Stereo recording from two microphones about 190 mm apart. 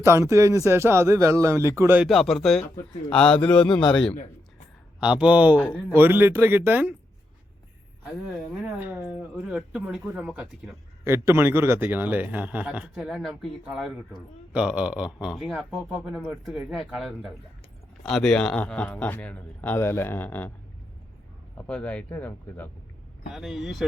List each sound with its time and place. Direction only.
0.0 s speech: 15° right (ahead or behind)
2.0 s a man's voice: centre (ahead or behind)
3.7 s a man's voice: 25° left (ahead or behind)
4.9 s speech: 5° right (ahead or behind)
5.5 s speech: 5° left (ahead or behind)
5.9 s speech: 10° right (ahead or behind)
8.6 s a man's voice: 10° right (ahead or behind); by 20.5 s 10° left (ahead or behind)
21.7 s a man's voice: 5° left (ahead or behind)
23.3 s speech: centre (ahead or behind)